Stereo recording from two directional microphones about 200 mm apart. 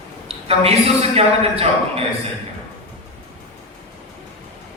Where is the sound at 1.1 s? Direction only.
30° right (ahead or behind).